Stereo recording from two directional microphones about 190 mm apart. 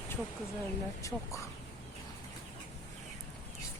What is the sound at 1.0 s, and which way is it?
Speech, 15° left (ahead or behind).